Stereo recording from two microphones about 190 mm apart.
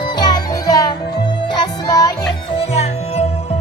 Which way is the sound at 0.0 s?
25° left (ahead or behind).